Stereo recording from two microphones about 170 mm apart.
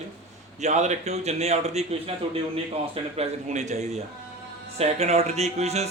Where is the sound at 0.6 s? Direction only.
45° right (ahead or behind).